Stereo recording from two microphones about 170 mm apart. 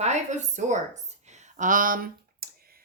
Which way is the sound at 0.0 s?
45° right (ahead or behind).